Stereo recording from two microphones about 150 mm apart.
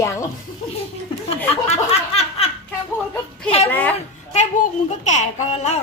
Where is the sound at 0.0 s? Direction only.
20° left (ahead or behind).